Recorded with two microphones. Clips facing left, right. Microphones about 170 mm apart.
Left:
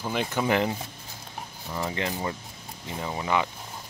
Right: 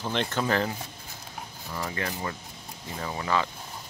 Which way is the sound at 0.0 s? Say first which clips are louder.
Left 1 dB; 10° left (ahead or behind).